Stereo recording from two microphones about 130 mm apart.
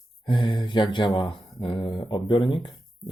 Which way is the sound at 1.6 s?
40° left (ahead or behind).